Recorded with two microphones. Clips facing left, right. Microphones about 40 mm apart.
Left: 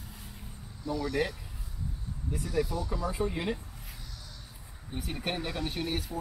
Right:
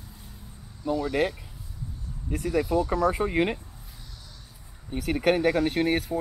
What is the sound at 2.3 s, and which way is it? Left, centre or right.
Speech, right.